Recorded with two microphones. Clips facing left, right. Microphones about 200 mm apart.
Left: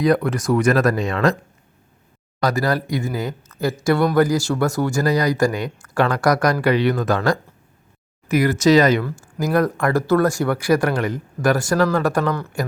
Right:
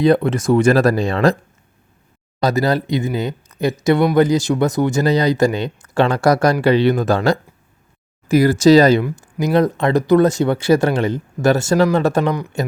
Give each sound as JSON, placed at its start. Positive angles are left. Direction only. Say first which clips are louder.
{"t": 0.0, "sound": "speech", "louder": "right 4 dB", "side_deg": -25}
{"t": 2.4, "sound": "speech", "louder": "right 3 dB", "side_deg": -25}
{"t": 8.3, "sound": "speech", "louder": "right 4 dB", "side_deg": -30}
{"t": 9.0, "sound": "speech", "louder": "right 3 dB", "side_deg": -20}